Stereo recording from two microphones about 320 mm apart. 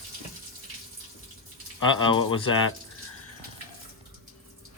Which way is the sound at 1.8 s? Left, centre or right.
Centre.